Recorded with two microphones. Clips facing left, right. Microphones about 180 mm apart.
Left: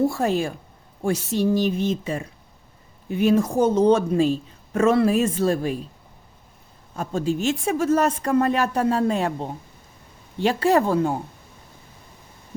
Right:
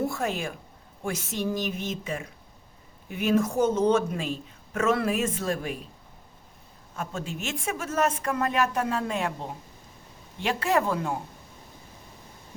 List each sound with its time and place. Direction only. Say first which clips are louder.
0.0 s speech: left 7 dB; 35° left (ahead or behind)
6.9 s speech: left 10 dB; 35° left (ahead or behind)
10.4 s speech: left 6 dB; 35° left (ahead or behind)